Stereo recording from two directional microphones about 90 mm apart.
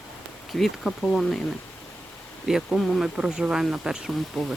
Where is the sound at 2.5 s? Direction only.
Centre (ahead or behind).